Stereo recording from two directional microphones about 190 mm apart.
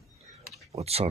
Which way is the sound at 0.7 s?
30° right (ahead or behind).